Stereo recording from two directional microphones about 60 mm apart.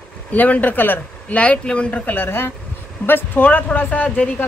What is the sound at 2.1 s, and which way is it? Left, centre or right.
Speech, left.